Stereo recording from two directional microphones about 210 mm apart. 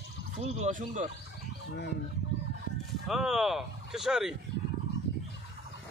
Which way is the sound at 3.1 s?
Centre (ahead or behind).